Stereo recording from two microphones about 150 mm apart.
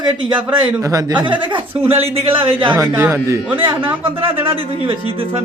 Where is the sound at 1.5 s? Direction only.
40° right (ahead or behind).